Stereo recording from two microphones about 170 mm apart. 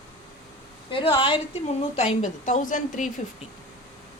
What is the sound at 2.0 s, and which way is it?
A woman's voice, 45° left (ahead or behind).